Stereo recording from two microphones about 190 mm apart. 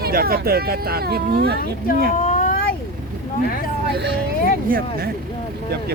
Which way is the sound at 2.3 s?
45° left (ahead or behind).